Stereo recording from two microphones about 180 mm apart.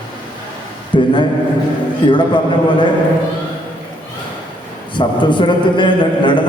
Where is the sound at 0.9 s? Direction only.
25° left (ahead or behind).